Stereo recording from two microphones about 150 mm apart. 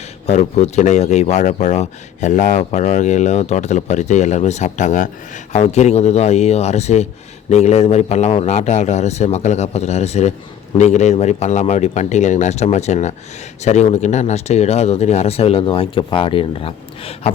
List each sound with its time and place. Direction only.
0.3 s speech: 50° left (ahead or behind)